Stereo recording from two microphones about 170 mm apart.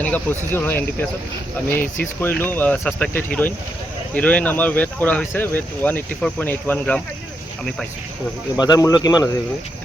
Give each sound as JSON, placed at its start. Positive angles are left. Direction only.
{"t": 0.0, "sound": "speech", "side_deg": 10}
{"t": 8.6, "sound": "speech", "side_deg": 25}